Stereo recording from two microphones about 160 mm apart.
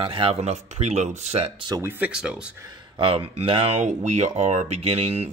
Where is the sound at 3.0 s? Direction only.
35° right (ahead or behind).